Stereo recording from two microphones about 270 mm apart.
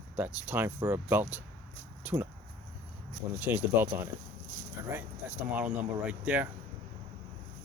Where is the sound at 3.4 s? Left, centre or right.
Centre.